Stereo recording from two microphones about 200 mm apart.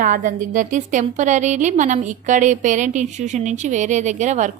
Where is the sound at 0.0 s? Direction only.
40° right (ahead or behind).